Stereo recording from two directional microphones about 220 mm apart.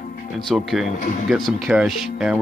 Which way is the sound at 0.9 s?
35° left (ahead or behind).